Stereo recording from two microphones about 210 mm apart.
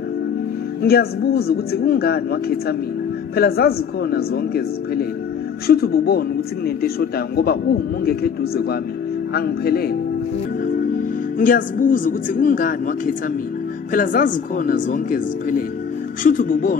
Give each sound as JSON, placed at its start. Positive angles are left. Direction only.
{"t": 0.8, "sound": "speech", "side_deg": 45}